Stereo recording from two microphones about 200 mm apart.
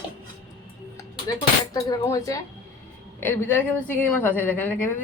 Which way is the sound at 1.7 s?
20° left (ahead or behind).